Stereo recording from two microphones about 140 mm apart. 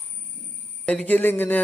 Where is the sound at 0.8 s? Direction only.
10° left (ahead or behind).